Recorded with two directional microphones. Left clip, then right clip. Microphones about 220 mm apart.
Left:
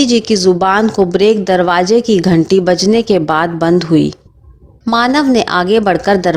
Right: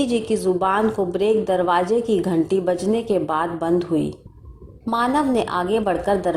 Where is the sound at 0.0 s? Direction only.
45° left (ahead or behind).